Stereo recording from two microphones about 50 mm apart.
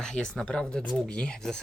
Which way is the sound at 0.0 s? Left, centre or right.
Centre.